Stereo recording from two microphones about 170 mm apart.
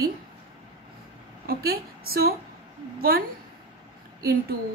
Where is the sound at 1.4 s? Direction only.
65° right (ahead or behind).